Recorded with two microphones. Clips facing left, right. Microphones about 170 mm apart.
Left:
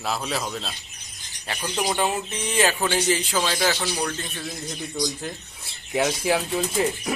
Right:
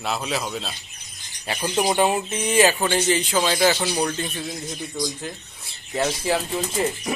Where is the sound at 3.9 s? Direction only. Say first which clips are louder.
Right 4 dB; 25° right (ahead or behind).